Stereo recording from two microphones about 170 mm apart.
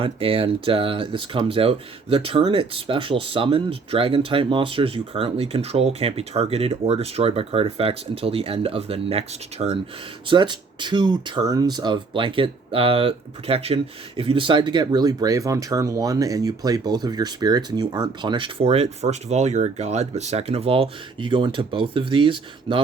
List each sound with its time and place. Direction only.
0.0 s speech: 30° right (ahead or behind)